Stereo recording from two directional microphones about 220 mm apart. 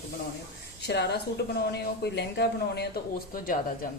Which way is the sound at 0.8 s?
50° left (ahead or behind).